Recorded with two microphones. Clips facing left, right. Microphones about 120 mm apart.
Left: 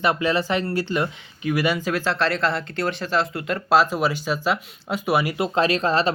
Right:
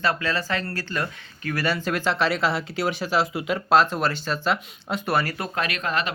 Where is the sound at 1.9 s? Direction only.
Centre (ahead or behind).